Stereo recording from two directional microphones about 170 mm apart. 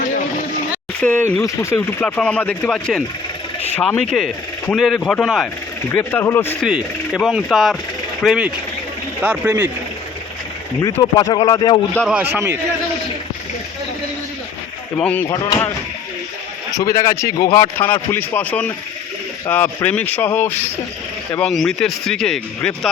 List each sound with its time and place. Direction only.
1.0 s speech: 10° left (ahead or behind)
5.9 s speech: 15° left (ahead or behind)
6.6 s a man's voice: 5° right (ahead or behind)
11.1 s speech: 20° left (ahead or behind)
12.0 s a man's voice: 10° right (ahead or behind)
14.9 s speech: 10° left (ahead or behind)
16.7 s speech: 20° left (ahead or behind); by 22.9 s 5° left (ahead or behind)